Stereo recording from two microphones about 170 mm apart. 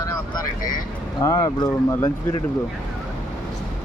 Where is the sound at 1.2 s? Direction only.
20° left (ahead or behind).